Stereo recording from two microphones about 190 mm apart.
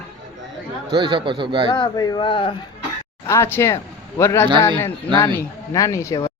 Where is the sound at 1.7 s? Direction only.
20° left (ahead or behind).